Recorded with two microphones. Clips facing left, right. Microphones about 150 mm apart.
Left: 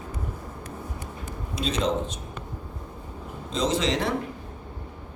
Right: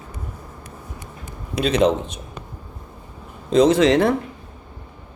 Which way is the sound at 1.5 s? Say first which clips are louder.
Right 8 dB; 65° right (ahead or behind).